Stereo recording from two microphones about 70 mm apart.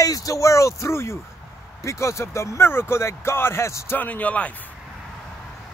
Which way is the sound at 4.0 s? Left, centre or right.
Left.